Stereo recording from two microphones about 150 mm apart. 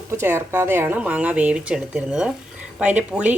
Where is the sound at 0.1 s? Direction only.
15° right (ahead or behind).